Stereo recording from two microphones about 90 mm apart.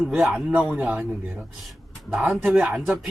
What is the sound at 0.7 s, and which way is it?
Speech, 15° right (ahead or behind).